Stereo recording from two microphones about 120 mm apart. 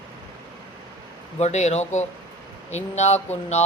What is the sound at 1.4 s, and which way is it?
Speech, 70° left (ahead or behind).